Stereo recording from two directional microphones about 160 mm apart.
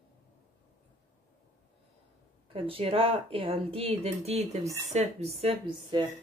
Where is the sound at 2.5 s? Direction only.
35° right (ahead or behind).